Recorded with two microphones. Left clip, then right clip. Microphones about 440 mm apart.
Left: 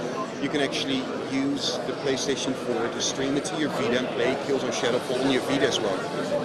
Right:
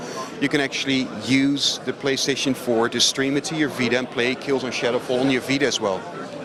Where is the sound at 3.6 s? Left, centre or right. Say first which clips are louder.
Right 4 dB; right.